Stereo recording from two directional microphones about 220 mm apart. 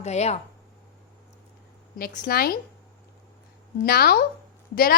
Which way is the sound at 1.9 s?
40° left (ahead or behind).